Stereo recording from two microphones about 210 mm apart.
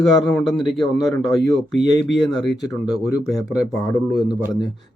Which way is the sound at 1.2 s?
15° left (ahead or behind).